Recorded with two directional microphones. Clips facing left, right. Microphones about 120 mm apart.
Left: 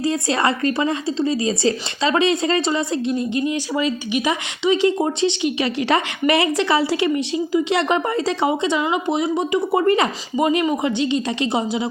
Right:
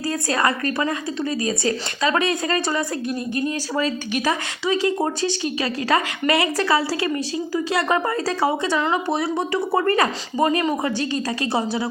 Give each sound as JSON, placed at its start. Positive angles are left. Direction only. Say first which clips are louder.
{"t": 0.0, "sound": "a woman's voice", "louder": "left 2 dB", "side_deg": 25}